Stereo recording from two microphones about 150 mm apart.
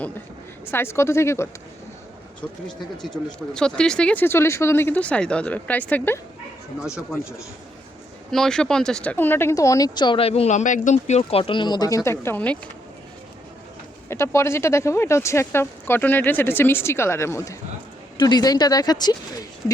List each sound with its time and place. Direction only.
0.6 s speech: 15° left (ahead or behind)
3.5 s speech: 5° left (ahead or behind)
6.8 s speech: 5° right (ahead or behind); by 12.5 s 10° left (ahead or behind)
14.1 s speech: 20° left (ahead or behind)